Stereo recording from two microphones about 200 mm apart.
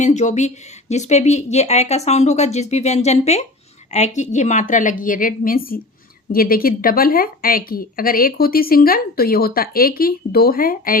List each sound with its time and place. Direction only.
0.0 s speech: 35° left (ahead or behind)